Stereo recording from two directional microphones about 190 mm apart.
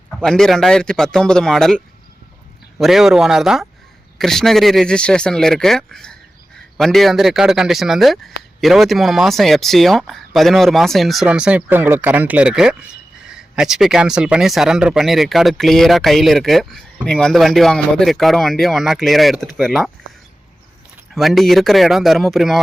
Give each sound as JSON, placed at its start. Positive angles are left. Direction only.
{"t": 0.1, "sound": "speech", "side_deg": 5}
{"t": 21.2, "sound": "speech", "side_deg": 0}